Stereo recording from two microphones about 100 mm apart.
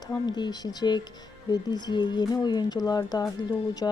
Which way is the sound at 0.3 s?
45° left (ahead or behind).